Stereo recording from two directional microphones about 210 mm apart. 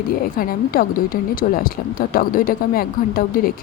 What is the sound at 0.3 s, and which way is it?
Speech, 45° left (ahead or behind).